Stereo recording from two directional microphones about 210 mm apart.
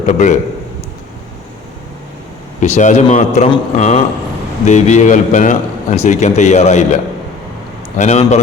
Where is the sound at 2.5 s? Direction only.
35° left (ahead or behind).